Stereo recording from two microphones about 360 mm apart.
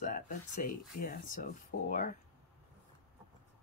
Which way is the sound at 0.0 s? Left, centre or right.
Left.